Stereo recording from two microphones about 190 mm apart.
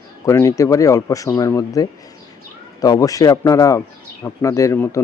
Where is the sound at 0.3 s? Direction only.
15° left (ahead or behind).